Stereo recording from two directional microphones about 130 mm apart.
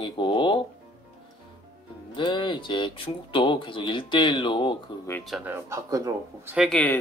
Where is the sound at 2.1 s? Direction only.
40° left (ahead or behind).